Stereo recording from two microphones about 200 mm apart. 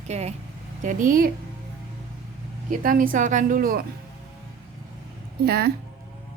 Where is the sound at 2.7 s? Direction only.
45° right (ahead or behind).